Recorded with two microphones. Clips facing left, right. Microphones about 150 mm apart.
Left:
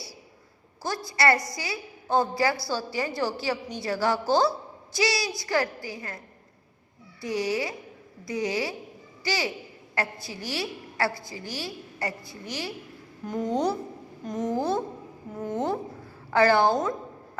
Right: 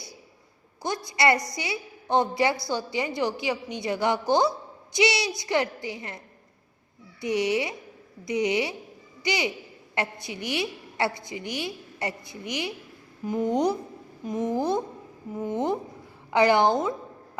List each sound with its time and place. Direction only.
0.8 s a woman's voice: 20° right (ahead or behind)
7.2 s a woman's voice: 20° right (ahead or behind)